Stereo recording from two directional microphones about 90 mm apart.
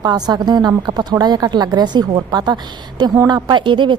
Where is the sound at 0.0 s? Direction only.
50° right (ahead or behind).